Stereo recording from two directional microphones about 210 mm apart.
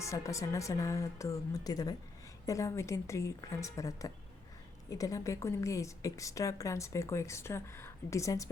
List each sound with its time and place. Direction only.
0.0 s a woman's voice: 15° left (ahead or behind)